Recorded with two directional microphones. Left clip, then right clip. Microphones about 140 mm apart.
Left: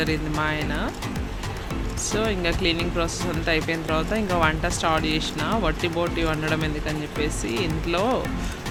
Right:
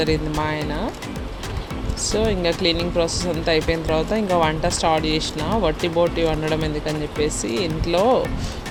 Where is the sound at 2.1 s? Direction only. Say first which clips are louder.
Right 4 dB; 20° right (ahead or behind).